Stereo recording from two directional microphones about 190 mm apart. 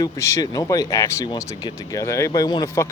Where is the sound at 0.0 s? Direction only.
15° left (ahead or behind).